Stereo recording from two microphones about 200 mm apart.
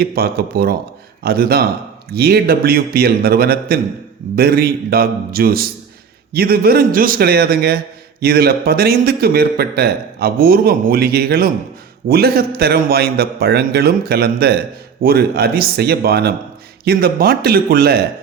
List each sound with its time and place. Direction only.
0.0 s a man's voice: 50° right (ahead or behind)